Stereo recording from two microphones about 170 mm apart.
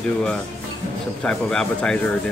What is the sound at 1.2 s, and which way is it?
Speech, 5° left (ahead or behind).